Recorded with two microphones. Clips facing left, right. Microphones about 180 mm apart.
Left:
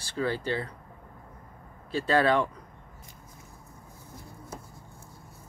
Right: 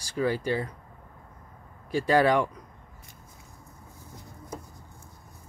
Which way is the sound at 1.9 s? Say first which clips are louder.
Right 2 dB; 15° right (ahead or behind).